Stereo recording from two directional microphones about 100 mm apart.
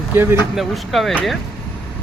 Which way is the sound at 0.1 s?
25° right (ahead or behind).